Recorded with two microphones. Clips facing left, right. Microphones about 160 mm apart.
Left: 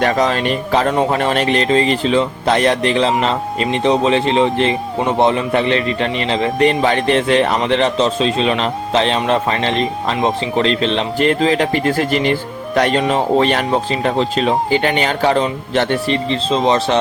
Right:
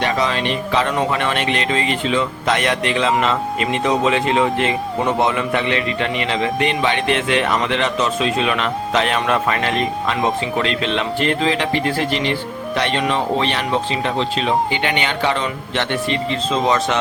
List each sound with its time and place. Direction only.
0.0 s speech: 45° left (ahead or behind)